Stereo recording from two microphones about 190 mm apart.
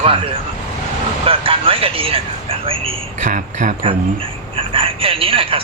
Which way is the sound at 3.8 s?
30° right (ahead or behind).